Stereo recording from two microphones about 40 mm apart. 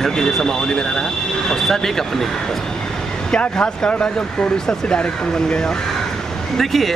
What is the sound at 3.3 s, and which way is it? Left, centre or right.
Speech, left.